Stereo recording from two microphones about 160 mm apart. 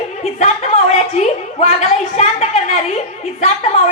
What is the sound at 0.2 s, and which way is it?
A woman's voice, 40° left (ahead or behind).